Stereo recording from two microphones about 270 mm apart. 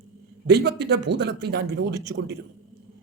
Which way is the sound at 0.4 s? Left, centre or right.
Right.